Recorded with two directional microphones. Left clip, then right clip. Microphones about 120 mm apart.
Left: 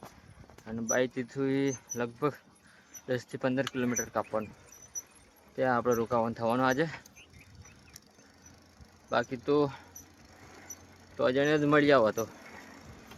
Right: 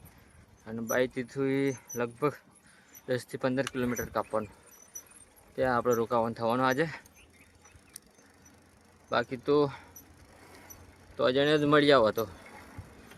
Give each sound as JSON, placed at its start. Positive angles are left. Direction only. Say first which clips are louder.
{"t": 0.6, "sound": "speech", "louder": "even", "side_deg": -25}
{"t": 5.5, "sound": "speech", "louder": "right 1 dB", "side_deg": -20}
{"t": 9.0, "sound": "cricket", "louder": "right 1 dB", "side_deg": -20}
{"t": 11.2, "sound": "a sound", "louder": "right 1 dB", "side_deg": -25}